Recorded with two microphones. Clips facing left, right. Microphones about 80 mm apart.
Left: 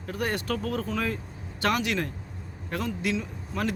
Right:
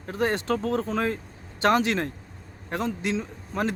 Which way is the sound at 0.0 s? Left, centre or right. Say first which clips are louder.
Right 4 dB; right.